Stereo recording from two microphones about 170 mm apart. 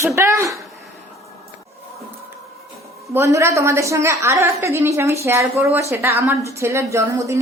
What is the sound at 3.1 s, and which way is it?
A woman's voice, 15° right (ahead or behind).